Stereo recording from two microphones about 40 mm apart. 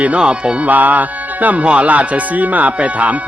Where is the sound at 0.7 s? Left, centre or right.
Right.